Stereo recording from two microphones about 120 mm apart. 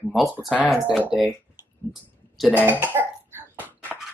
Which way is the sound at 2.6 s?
15° right (ahead or behind).